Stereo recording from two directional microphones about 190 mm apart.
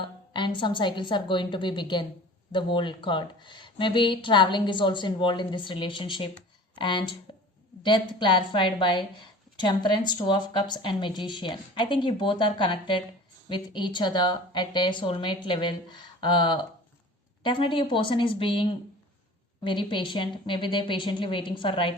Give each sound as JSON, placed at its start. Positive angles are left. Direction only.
{"t": 0.0, "sound": "a woman's voice", "side_deg": 25}